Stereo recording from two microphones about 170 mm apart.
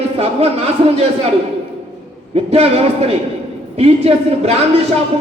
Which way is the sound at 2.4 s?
35° right (ahead or behind).